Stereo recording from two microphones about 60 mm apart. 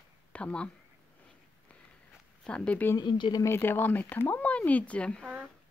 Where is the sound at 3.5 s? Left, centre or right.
Left.